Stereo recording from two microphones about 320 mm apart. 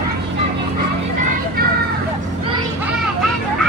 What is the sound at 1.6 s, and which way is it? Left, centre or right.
Vehicle, right.